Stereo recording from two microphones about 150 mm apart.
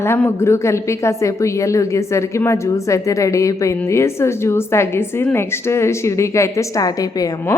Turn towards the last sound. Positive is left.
turn(degrees=25)  # may be behind; listen again after turning